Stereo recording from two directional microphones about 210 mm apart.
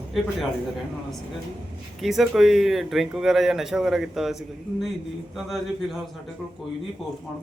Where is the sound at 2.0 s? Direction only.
Centre (ahead or behind).